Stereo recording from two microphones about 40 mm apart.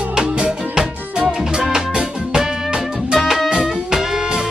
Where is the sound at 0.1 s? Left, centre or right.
Right.